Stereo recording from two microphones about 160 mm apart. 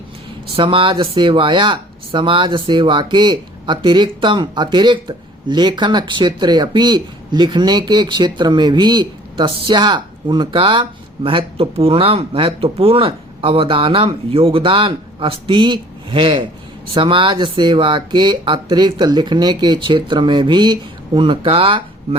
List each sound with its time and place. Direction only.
0.5 s speech: 35° right (ahead or behind)